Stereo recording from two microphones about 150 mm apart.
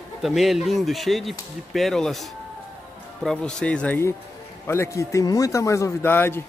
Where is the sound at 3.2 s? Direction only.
5° left (ahead or behind).